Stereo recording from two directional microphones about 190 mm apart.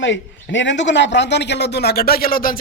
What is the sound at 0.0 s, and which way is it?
A man's voice, 75° left (ahead or behind).